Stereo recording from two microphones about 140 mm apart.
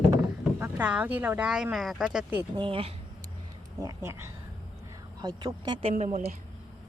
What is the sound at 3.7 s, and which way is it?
Speech, 20° right (ahead or behind).